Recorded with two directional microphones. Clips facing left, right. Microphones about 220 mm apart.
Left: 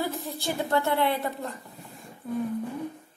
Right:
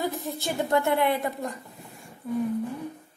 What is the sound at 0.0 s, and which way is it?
A woman's voice, 20° right (ahead or behind).